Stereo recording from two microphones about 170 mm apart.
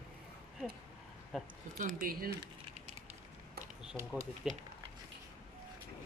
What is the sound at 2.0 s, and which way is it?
Speech, 60° right (ahead or behind).